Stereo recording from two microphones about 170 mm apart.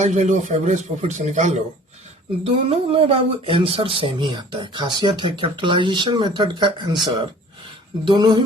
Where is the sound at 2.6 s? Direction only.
35° right (ahead or behind).